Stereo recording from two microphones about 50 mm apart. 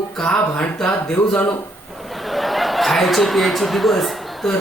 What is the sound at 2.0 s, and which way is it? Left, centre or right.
Chuckle, centre.